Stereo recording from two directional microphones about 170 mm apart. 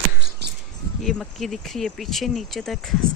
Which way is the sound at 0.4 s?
75° right (ahead or behind).